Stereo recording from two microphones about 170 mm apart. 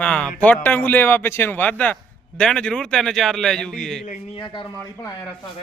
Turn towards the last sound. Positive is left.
turn(degrees=20)  # may be behind; listen again after turning